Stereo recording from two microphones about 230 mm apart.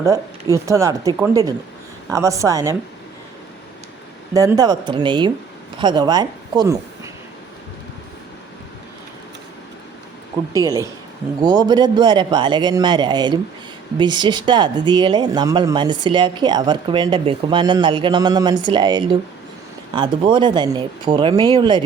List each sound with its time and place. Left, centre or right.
0.0 s speech: centre
4.4 s speech: centre
10.5 s speech: centre